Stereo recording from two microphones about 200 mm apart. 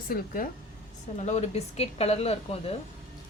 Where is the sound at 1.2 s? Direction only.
35° left (ahead or behind).